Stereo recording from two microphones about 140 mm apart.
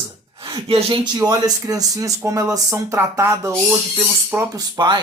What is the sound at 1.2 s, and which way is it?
Speech, 25° right (ahead or behind).